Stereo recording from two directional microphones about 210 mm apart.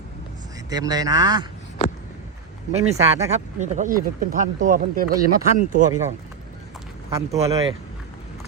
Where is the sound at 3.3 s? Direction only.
35° right (ahead or behind).